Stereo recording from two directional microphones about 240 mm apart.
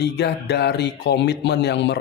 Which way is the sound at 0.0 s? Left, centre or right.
Left.